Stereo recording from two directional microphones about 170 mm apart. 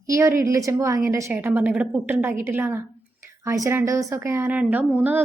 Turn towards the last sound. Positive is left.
turn(degrees=-10)  # may be behind; listen again after turning